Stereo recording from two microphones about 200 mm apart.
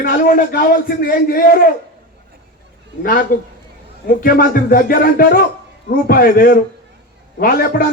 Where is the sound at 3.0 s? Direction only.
45° left (ahead or behind).